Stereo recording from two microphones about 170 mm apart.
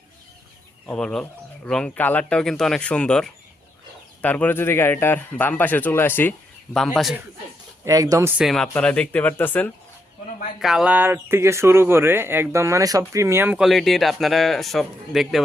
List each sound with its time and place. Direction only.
0.9 s speech: 5° left (ahead or behind)
7.9 s speech: 20° right (ahead or behind)
8.4 s speech: centre (ahead or behind)
10.6 s speech: 5° right (ahead or behind)